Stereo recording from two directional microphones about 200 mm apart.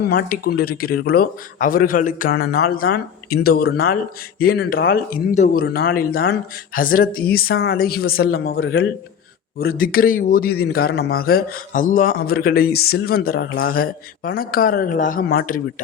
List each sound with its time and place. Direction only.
0.0 s a man's voice: 50° left (ahead or behind)